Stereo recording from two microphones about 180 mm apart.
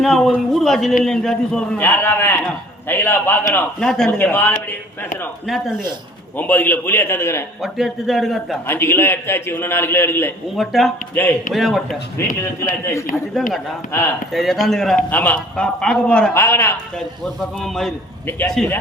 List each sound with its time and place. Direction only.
0.0 s a man's voice: centre (ahead or behind)
5.5 s a man's voice: centre (ahead or behind)
7.6 s speech: centre (ahead or behind)
8.6 s a man's voice: 10° left (ahead or behind)
10.6 s speech: centre (ahead or behind)
11.1 s a man's voice: 10° left (ahead or behind)
12.4 s a man's voice: 15° left (ahead or behind)
14.3 s a man's voice: centre (ahead or behind)
17.6 s a man's voice: centre (ahead or behind)